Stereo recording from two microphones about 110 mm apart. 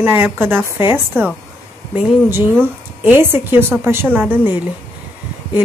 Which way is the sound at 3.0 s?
20° right (ahead or behind).